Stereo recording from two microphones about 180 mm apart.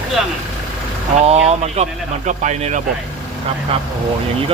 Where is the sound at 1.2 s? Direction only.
35° right (ahead or behind).